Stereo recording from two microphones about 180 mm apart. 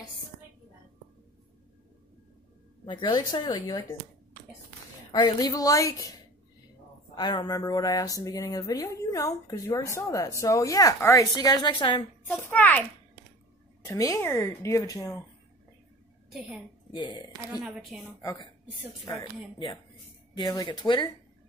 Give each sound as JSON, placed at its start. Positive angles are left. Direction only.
{"t": 2.8, "sound": "speech", "side_deg": 25}
{"t": 5.1, "sound": "speech", "side_deg": 20}
{"t": 7.2, "sound": "speech", "side_deg": 25}
{"t": 12.4, "sound": "speech", "side_deg": 10}
{"t": 13.8, "sound": "speech", "side_deg": 15}
{"t": 16.3, "sound": "a child's voice", "side_deg": 0}
{"t": 16.9, "sound": "speech", "side_deg": 25}
{"t": 17.6, "sound": "a woman's voice", "side_deg": 0}
{"t": 18.2, "sound": "speech", "side_deg": 15}
{"t": 20.3, "sound": "speech", "side_deg": 25}